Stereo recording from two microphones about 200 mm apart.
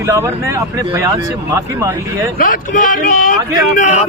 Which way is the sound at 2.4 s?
45° left (ahead or behind).